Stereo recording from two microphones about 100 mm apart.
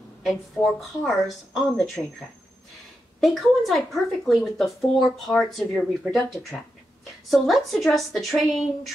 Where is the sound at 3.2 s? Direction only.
Centre (ahead or behind).